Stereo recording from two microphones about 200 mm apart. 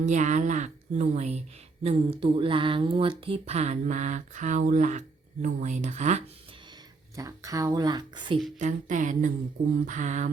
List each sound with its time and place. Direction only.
0.0 s a woman's voice: 35° right (ahead or behind)
7.2 s speech: 15° right (ahead or behind)
8.5 s a woman's voice: 40° right (ahead or behind)